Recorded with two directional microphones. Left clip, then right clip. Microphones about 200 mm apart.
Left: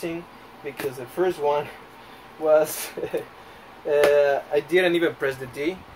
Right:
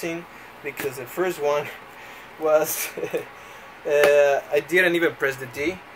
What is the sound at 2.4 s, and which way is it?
Speech, 10° right (ahead or behind).